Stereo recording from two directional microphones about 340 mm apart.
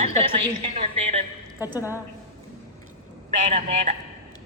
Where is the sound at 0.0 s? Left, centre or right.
Centre.